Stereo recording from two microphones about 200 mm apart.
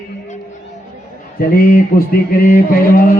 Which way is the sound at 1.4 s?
45° left (ahead or behind).